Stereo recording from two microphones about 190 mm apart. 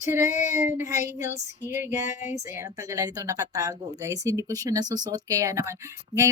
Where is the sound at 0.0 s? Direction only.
15° right (ahead or behind).